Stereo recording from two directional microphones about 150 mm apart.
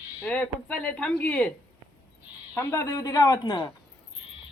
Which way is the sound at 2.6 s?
15° left (ahead or behind).